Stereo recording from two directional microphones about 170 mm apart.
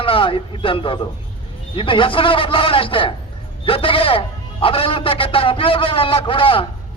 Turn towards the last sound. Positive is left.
turn(degrees=30)  # may be behind; listen again after turning